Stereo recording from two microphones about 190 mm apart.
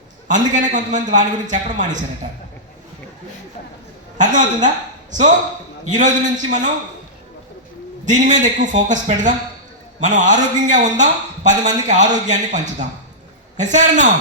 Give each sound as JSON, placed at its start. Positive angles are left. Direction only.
{"t": 0.3, "sound": "speech", "side_deg": -40}
{"t": 4.2, "sound": "speech", "side_deg": -40}
{"t": 5.9, "sound": "speech", "side_deg": -40}
{"t": 8.0, "sound": "speech", "side_deg": -40}